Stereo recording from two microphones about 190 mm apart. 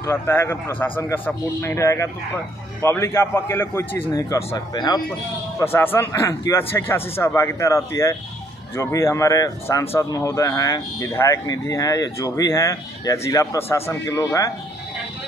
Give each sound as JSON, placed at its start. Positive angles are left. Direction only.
{"t": 0.0, "sound": "speech", "side_deg": 10}